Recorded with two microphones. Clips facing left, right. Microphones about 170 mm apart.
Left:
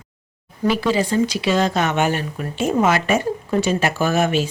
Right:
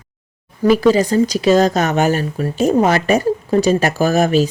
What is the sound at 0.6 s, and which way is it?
Speech, 40° right (ahead or behind).